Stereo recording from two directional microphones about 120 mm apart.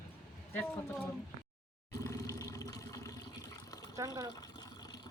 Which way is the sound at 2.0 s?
25° left (ahead or behind).